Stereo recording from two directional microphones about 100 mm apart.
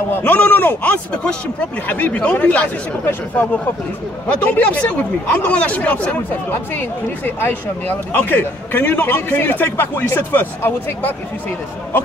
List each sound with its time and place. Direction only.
0.1 s speech: 15° left (ahead or behind)